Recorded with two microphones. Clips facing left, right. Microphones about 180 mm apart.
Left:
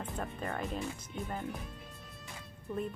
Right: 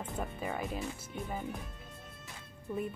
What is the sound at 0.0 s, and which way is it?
Speech, 5° right (ahead or behind).